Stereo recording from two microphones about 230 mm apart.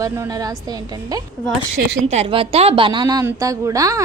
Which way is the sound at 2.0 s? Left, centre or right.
Right.